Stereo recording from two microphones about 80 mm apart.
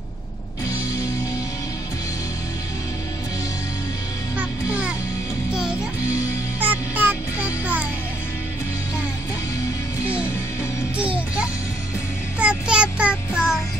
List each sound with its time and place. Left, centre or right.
4.4 s music: centre
6.6 s music: right
12.4 s a sound: centre
13.3 s child singing: centre